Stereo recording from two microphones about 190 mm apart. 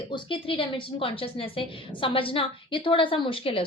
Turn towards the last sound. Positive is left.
turn(degrees=30)  # may be behind; listen again after turning